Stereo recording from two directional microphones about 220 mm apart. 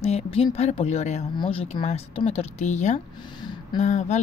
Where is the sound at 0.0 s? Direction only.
30° left (ahead or behind).